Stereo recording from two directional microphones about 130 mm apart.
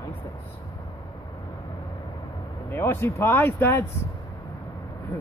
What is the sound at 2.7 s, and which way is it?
Speech, 20° left (ahead or behind).